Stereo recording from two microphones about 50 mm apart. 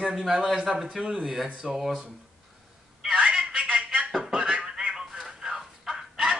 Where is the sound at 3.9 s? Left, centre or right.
Centre.